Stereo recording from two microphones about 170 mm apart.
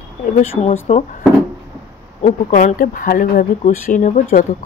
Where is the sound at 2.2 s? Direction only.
45° left (ahead or behind).